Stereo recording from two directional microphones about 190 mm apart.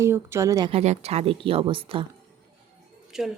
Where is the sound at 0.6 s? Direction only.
35° right (ahead or behind).